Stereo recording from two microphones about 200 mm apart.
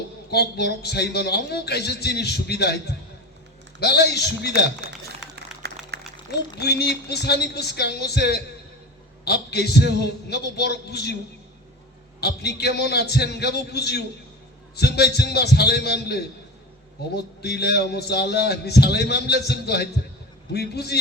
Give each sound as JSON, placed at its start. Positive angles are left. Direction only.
{"t": 0.3, "sound": "speech", "side_deg": 55}
{"t": 5.0, "sound": "a sound", "side_deg": -55}
{"t": 6.6, "sound": "speech", "side_deg": 55}
{"t": 12.2, "sound": "speech", "side_deg": 55}